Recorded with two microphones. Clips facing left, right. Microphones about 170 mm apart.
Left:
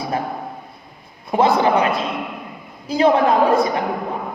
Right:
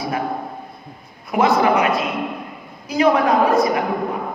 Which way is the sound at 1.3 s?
30° left (ahead or behind).